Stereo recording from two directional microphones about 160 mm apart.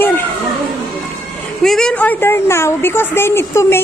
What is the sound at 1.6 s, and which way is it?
A woman's voice, 5° left (ahead or behind).